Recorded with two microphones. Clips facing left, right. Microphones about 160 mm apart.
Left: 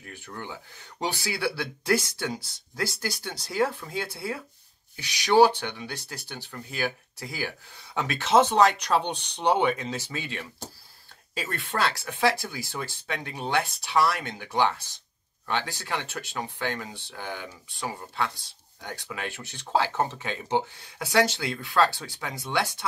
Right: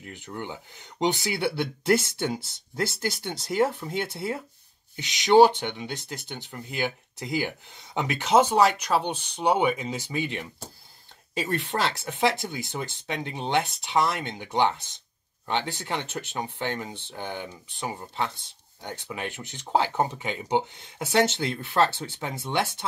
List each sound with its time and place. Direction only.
0.0 s speech: 20° right (ahead or behind)